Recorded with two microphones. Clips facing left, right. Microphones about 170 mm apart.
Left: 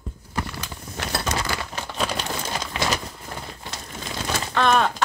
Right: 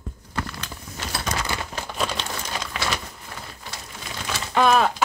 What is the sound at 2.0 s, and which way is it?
Crumpling, 10° left (ahead or behind).